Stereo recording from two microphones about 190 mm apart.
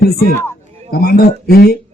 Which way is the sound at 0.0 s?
55° left (ahead or behind).